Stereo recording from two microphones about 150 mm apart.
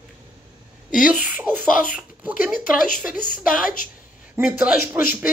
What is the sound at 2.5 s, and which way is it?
Speech, 65° left (ahead or behind).